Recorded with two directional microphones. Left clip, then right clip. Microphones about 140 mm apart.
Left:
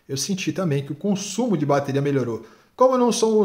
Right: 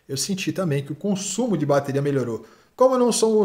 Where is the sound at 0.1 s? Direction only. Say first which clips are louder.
Even; centre (ahead or behind).